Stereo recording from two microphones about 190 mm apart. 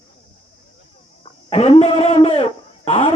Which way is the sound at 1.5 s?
30° left (ahead or behind).